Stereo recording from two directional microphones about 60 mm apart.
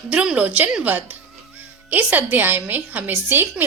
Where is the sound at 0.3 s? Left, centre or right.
Right.